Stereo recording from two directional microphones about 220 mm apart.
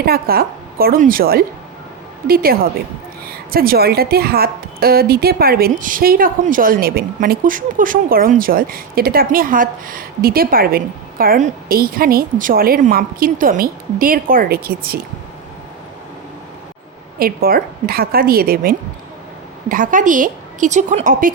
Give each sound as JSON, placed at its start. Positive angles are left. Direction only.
{"t": 0.0, "sound": "a woman's voice", "side_deg": -45}
{"t": 17.2, "sound": "a woman's voice", "side_deg": -40}